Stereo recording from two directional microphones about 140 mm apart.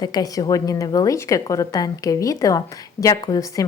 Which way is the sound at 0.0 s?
30° left (ahead or behind).